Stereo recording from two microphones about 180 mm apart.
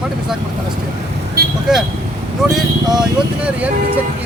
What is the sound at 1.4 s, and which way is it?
Speech, 60° right (ahead or behind).